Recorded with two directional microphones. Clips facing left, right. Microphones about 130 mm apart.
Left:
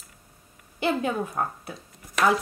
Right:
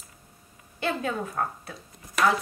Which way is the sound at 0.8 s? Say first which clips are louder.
Left 3 dB; 15° left (ahead or behind).